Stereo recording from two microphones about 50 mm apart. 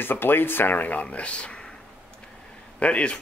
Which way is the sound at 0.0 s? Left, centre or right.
Left.